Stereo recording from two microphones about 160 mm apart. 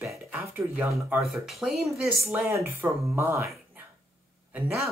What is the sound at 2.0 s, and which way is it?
A woman's voice, 20° right (ahead or behind).